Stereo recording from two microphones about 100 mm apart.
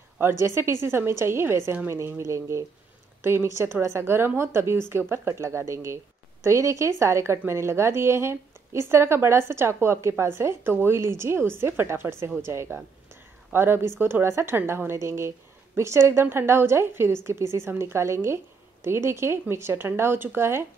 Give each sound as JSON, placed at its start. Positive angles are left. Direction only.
{"t": 0.2, "sound": "a woman's voice", "side_deg": -25}